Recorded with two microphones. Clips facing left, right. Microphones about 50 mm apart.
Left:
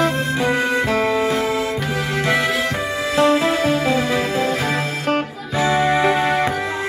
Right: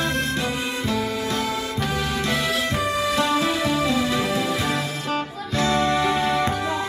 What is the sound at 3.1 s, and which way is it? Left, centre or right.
Music, left.